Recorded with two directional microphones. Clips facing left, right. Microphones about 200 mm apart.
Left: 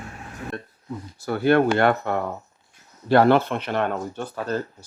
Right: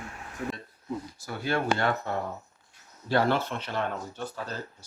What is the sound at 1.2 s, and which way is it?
Speech, 60° left (ahead or behind).